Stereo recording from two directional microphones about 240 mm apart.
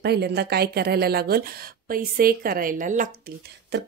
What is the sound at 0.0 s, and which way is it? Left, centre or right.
A woman's voice, right.